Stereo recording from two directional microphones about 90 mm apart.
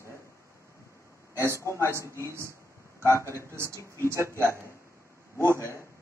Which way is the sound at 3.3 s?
30° right (ahead or behind).